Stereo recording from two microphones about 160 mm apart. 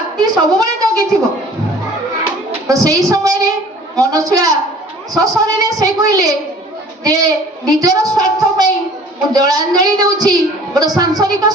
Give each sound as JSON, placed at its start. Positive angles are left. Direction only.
{"t": 0.2, "sound": "a woman's voice", "side_deg": -25}
{"t": 2.6, "sound": "a woman's voice", "side_deg": -20}